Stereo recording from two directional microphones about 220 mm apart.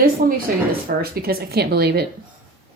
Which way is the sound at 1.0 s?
45° right (ahead or behind).